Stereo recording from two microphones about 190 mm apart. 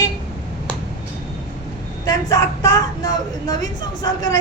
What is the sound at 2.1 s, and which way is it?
A woman's voice, 20° left (ahead or behind).